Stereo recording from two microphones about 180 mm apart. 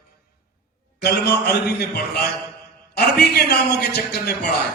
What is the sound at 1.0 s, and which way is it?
A man's voice, 65° left (ahead or behind).